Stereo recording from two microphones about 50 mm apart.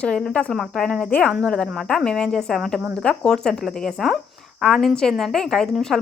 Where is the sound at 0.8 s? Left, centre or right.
Centre.